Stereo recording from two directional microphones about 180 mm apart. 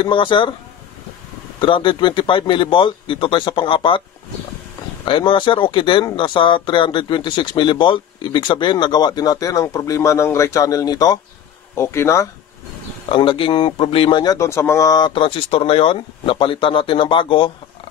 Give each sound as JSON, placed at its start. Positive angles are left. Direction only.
{"t": 0.0, "sound": "speech", "side_deg": 25}
{"t": 1.6, "sound": "speech", "side_deg": 30}
{"t": 5.0, "sound": "speech", "side_deg": 30}
{"t": 13.1, "sound": "speech", "side_deg": 30}